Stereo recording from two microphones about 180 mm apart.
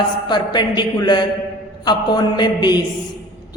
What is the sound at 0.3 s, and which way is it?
A man's voice, 25° left (ahead or behind).